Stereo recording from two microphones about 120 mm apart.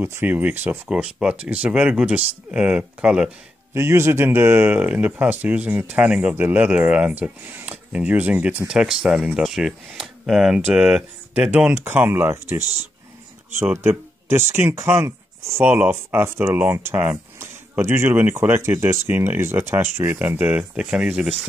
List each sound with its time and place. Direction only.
0.0 s speech: 15° right (ahead or behind)
3.7 s speech: 20° right (ahead or behind)
11.7 s speech: 20° right (ahead or behind)